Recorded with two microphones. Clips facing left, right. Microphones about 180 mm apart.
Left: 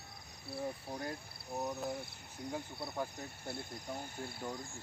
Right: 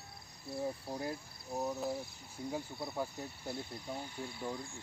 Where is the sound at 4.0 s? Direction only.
45° left (ahead or behind).